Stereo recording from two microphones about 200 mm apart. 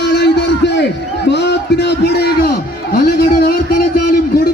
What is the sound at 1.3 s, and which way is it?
A man's voice, 60° left (ahead or behind).